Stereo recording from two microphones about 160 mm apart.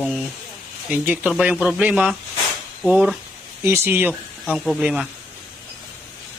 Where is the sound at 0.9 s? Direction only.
10° right (ahead or behind).